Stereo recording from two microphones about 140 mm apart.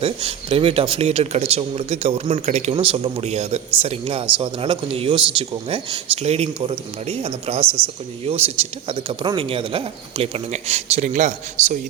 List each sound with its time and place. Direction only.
0.0 s a man's voice: 40° right (ahead or behind)
2.7 s a man's voice: 40° right (ahead or behind)
7.6 s speech: 15° right (ahead or behind)
8.2 s a man's voice: 45° right (ahead or behind)